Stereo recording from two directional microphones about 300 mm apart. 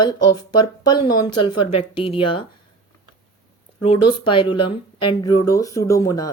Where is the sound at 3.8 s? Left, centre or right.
Centre.